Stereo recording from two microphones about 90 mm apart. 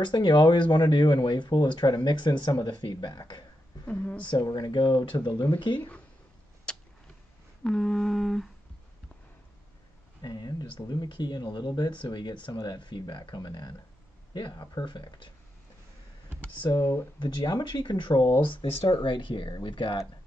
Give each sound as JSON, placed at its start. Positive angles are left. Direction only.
{"t": 0.0, "sound": "speech", "side_deg": 60}
{"t": 3.8, "sound": "speech", "side_deg": 20}
{"t": 4.5, "sound": "speech", "side_deg": 50}
{"t": 5.8, "sound": "speech", "side_deg": 15}
{"t": 6.7, "sound": "a sound", "side_deg": 10}
{"t": 7.6, "sound": "humming", "side_deg": 5}
{"t": 10.2, "sound": "speech", "side_deg": 50}
{"t": 16.3, "sound": "computer keyboard", "side_deg": 15}
{"t": 16.7, "sound": "speech", "side_deg": 25}
{"t": 17.2, "sound": "speech", "side_deg": 55}